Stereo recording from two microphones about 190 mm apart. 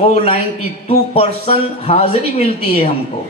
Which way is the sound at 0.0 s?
30° left (ahead or behind).